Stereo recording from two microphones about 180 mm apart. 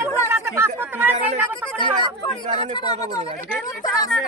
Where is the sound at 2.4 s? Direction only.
40° right (ahead or behind).